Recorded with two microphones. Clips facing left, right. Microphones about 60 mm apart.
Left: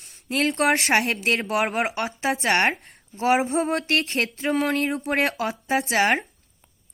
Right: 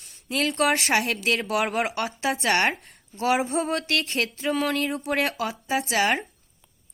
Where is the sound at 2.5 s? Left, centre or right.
Left.